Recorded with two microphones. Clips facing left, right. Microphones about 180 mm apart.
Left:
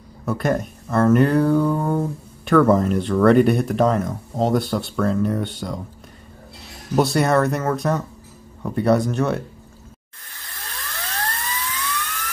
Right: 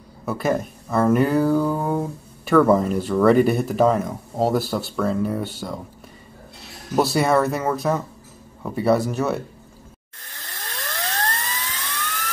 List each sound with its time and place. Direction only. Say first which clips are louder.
0.2 s speech: left 1 dB; 5° right (ahead or behind)
7.0 s speech: left 1 dB; centre (ahead or behind)
11.0 s dental drill: right 2 dB; 45° right (ahead or behind)